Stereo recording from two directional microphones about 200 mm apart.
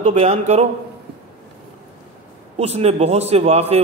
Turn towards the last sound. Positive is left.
turn(degrees=-30)  # may be behind; listen again after turning